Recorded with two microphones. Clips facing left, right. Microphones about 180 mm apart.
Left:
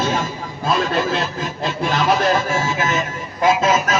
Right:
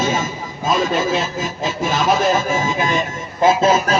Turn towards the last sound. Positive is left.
turn(degrees=-30)  # may be behind; listen again after turning